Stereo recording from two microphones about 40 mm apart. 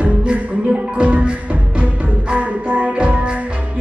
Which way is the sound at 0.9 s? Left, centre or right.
Right.